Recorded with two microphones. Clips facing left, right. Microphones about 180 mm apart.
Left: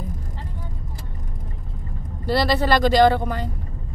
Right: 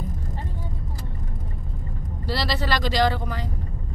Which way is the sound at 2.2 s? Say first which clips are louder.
Left 7 dB; 55° left (ahead or behind).